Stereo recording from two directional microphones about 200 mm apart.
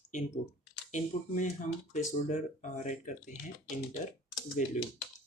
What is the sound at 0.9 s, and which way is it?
Speech, 40° left (ahead or behind).